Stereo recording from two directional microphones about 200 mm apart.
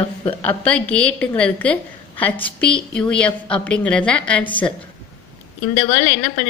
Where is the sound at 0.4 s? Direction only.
5° left (ahead or behind).